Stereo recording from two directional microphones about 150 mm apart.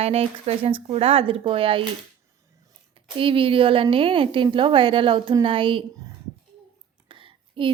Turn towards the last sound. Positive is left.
turn(degrees=-35)  # may be behind; listen again after turning